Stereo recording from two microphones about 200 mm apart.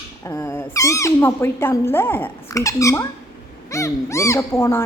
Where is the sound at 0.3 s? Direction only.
15° left (ahead or behind).